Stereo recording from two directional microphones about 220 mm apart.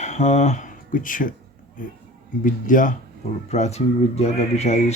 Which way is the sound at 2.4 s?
35° left (ahead or behind).